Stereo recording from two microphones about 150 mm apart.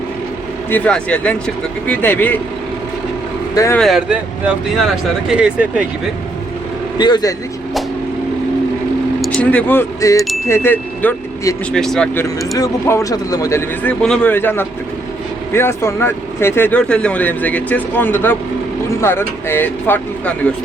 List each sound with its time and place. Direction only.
0.7 s speech: 10° left (ahead or behind)
3.5 s speech: 20° left (ahead or behind)
3.8 s speech: centre (ahead or behind)
7.0 s speech: 25° left (ahead or behind)
9.2 s speech: 10° left (ahead or behind)
12.5 s speech: 20° left (ahead or behind)
14.0 s speech: 5° left (ahead or behind)